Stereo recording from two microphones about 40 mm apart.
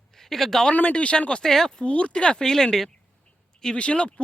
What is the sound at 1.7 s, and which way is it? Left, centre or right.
Speech, left.